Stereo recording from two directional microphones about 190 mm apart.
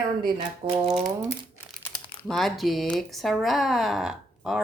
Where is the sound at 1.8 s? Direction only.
5° left (ahead or behind).